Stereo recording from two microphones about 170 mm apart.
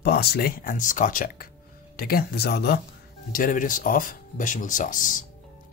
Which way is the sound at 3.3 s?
55° left (ahead or behind).